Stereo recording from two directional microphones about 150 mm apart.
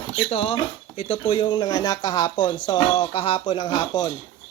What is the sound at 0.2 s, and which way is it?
Speech, 40° left (ahead or behind).